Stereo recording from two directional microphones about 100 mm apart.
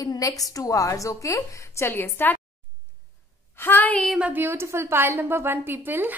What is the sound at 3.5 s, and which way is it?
Speech, 20° left (ahead or behind).